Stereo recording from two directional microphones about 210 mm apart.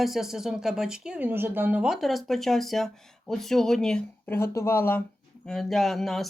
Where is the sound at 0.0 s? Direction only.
Centre (ahead or behind).